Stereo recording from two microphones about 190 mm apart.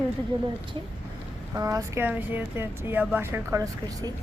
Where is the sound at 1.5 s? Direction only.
15° right (ahead or behind).